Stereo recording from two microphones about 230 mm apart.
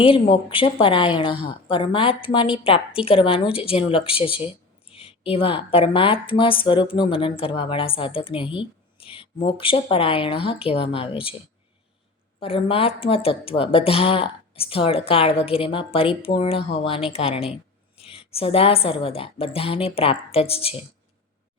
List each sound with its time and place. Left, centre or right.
0.0 s a woman's voice: left
12.4 s a woman's voice: left